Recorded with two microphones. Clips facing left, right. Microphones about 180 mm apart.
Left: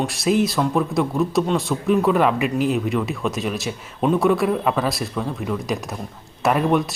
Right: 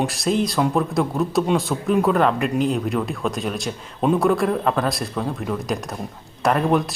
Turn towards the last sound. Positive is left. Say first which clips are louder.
# even
turn(degrees=0)  # may be behind; listen again after turning